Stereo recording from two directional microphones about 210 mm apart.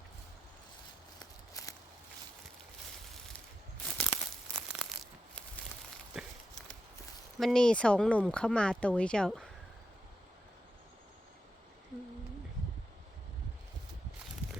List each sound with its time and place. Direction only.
1.2 s walk: 15° left (ahead or behind)
3.9 s crumpling: centre (ahead or behind)
4.7 s a sound: centre (ahead or behind)
7.3 s speech: centre (ahead or behind)